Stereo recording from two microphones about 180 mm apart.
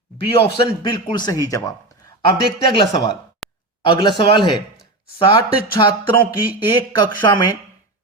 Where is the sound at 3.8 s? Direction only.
25° left (ahead or behind).